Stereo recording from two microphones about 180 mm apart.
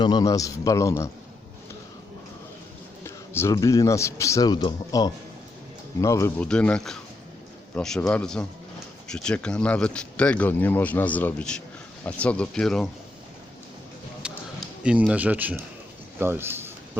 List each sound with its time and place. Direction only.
0.0 s a man's voice: 20° left (ahead or behind)
3.0 s a man's voice: 15° left (ahead or behind)
14.8 s speech: 5° right (ahead or behind)
16.2 s a sound: 10° right (ahead or behind)